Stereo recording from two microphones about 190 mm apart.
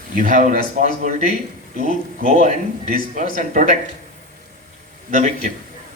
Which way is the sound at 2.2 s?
40° right (ahead or behind).